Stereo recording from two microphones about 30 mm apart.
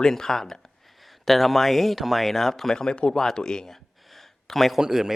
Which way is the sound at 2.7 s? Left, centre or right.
Left.